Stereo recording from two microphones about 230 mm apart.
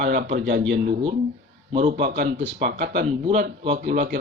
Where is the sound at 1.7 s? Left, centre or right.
Right.